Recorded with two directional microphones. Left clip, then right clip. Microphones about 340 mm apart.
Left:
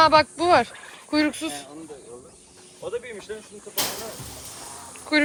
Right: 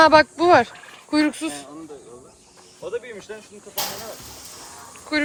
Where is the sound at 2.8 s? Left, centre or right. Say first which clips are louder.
Right 1 dB; right.